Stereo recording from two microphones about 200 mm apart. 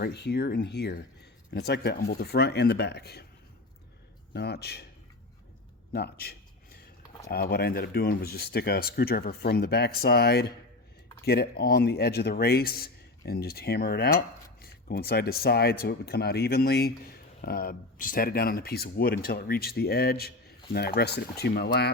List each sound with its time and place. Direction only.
0.0 s speech: 55° left (ahead or behind)
4.4 s speech: 55° left (ahead or behind)
5.9 s a sound: 50° left (ahead or behind)
7.3 s speech: 50° left (ahead or behind)